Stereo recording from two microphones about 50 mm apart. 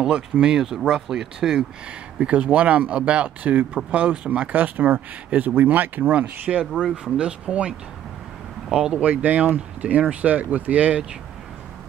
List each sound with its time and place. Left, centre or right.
0.0 s speech: centre
2.1 s speech: right
6.6 s speech: centre
7.1 s speech: right
9.0 s speech: right